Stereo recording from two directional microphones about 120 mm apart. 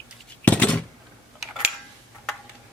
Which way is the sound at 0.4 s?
10° left (ahead or behind).